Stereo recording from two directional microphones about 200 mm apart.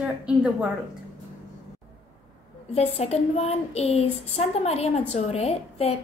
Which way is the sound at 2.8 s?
30° left (ahead or behind).